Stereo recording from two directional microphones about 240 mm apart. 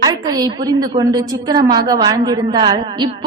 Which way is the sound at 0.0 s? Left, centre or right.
Centre.